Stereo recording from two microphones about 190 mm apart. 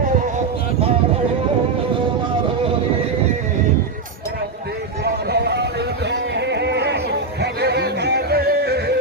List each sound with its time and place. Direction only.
5.0 s vehicle: 60° right (ahead or behind)
6.1 s a sound: 65° right (ahead or behind)
7.4 s yodeling: 60° right (ahead or behind)